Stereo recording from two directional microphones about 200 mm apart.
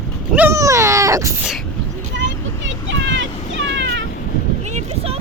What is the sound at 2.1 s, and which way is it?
Vehicle, 65° right (ahead or behind).